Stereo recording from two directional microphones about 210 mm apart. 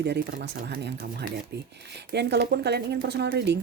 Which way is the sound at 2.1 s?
55° right (ahead or behind).